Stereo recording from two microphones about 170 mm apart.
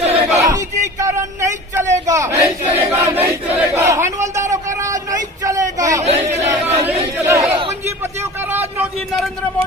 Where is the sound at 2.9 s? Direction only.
10° right (ahead or behind).